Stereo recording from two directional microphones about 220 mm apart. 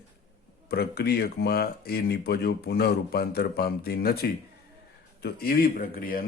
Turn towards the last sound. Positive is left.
turn(degrees=40)  # may be behind; listen again after turning